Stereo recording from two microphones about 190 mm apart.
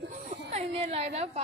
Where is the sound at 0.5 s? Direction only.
30° right (ahead or behind).